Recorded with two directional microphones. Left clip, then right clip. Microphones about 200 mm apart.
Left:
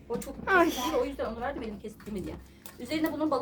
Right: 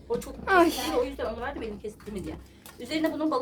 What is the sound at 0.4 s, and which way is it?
A woman's voice, 5° right (ahead or behind).